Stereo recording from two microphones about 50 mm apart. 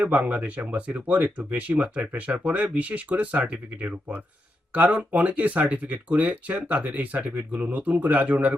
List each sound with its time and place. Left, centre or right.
0.0 s speech: right